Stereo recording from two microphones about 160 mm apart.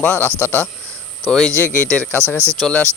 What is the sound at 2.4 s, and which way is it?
Speech, 15° right (ahead or behind).